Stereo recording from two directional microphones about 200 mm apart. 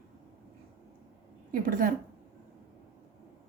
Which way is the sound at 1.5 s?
45° right (ahead or behind).